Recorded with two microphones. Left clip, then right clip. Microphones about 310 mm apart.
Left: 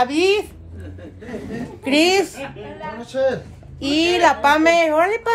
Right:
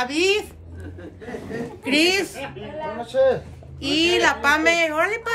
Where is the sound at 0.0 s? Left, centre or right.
Centre.